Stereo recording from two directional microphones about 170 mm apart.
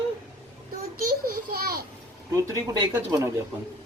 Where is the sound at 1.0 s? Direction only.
60° right (ahead or behind).